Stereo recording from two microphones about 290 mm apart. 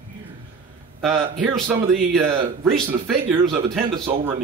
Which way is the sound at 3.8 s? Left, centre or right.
Centre.